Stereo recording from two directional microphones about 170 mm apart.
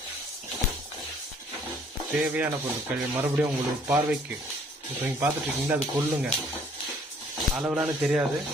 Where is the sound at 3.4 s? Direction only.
15° right (ahead or behind).